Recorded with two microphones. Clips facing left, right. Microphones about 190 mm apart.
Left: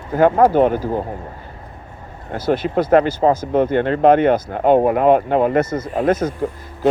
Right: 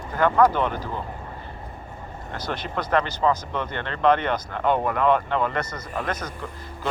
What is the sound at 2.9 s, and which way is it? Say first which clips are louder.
Speech: left 8 dB; 50° left (ahead or behind).